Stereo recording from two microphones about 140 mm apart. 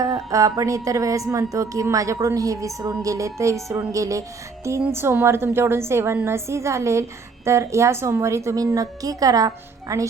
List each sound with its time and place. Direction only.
0.0 s a woman's voice: 25° right (ahead or behind)